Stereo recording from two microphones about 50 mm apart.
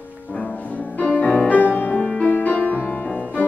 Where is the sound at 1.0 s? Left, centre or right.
Left.